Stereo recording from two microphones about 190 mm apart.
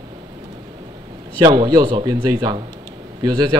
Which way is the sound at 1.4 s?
25° right (ahead or behind).